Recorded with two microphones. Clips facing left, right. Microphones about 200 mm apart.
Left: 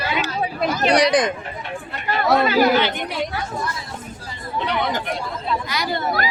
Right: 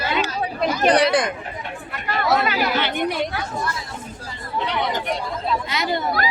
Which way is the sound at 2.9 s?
55° right (ahead or behind).